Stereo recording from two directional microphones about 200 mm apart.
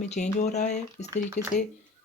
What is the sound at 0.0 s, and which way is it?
Speech, 35° left (ahead or behind).